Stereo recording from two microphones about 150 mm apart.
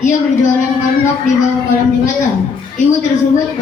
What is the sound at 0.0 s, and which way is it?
Speech, 55° left (ahead or behind).